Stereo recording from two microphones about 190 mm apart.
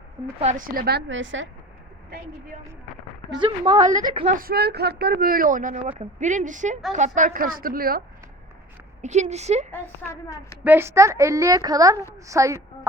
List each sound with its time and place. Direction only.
0.3 s a woman's voice: 40° right (ahead or behind); by 1.5 s 80° right
3.3 s a woman's voice: 25° right (ahead or behind)
4.4 s speech: 55° right (ahead or behind)
9.0 s a woman's voice: 35° right (ahead or behind)
10.1 s a woman's voice: 15° left (ahead or behind)
10.6 s a woman's voice: 10° right (ahead or behind)